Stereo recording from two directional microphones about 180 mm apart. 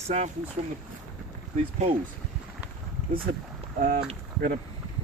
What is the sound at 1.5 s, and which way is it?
Speech, 35° right (ahead or behind).